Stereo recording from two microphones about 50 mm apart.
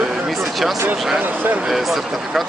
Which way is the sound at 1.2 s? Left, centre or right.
Right.